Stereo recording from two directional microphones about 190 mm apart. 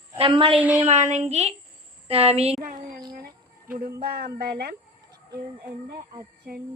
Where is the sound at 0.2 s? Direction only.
25° right (ahead or behind).